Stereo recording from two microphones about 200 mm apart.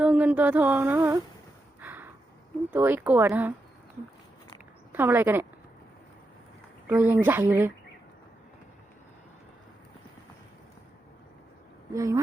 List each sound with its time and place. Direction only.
0.0 s a sound: 5° right (ahead or behind)
2.6 s speech: 10° right (ahead or behind)
4.9 s speech: 10° right (ahead or behind)
6.8 s speech: 10° right (ahead or behind)
11.9 s speech: 15° right (ahead or behind)